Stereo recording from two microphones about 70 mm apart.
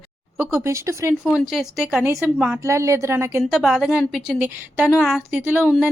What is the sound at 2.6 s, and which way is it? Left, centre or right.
Speech, right.